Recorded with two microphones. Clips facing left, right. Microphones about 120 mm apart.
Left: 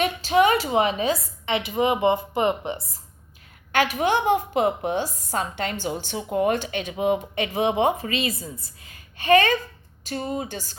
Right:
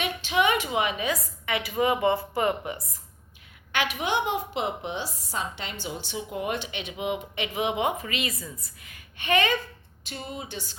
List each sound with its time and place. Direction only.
0.0 s a woman's voice: 40° left (ahead or behind)
3.7 s a woman's voice: 40° left (ahead or behind)